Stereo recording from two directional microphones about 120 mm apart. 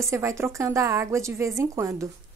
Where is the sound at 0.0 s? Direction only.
25° right (ahead or behind).